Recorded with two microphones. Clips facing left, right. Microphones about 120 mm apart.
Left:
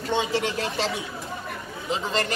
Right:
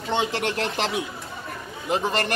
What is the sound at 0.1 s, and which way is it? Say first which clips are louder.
Speech: even; 65° right (ahead or behind).